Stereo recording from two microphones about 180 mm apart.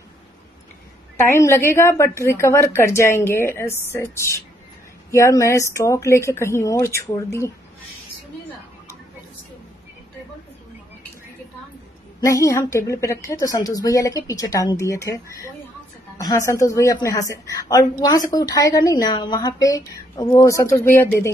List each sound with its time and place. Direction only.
1.2 s a woman's voice: 15° left (ahead or behind)
12.2 s a woman's voice: 20° left (ahead or behind)